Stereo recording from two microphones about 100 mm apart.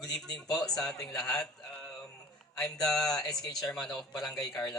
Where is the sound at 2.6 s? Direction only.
5° left (ahead or behind).